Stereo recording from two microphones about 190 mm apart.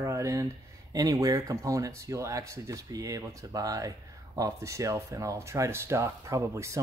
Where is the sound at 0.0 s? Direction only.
15° right (ahead or behind).